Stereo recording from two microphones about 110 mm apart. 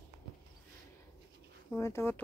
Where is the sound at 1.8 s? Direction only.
25° left (ahead or behind).